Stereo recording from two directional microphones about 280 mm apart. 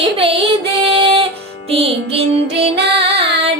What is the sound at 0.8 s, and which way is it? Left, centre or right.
Female singing, centre.